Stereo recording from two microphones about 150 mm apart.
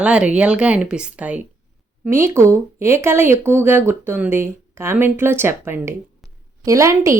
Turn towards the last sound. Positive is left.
turn(degrees=-20)  # may be behind; listen again after turning